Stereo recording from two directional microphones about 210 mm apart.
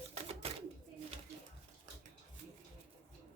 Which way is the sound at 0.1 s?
30° right (ahead or behind).